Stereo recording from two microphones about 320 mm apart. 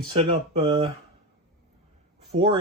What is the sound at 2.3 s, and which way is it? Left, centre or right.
Speech, centre.